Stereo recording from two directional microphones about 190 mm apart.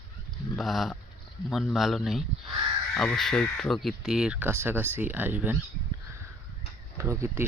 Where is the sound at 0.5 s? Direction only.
Centre (ahead or behind).